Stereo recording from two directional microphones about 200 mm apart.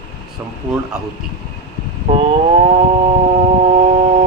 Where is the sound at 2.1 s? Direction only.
30° right (ahead or behind).